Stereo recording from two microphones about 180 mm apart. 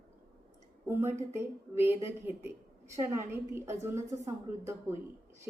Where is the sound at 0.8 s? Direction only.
15° right (ahead or behind).